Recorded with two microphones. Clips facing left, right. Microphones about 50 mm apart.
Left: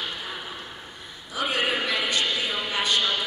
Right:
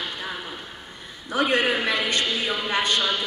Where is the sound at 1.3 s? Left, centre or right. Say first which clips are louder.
Right 4 dB; right.